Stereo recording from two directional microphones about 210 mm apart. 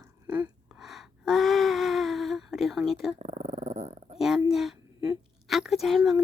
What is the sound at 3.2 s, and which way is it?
Dog, 35° right (ahead or behind).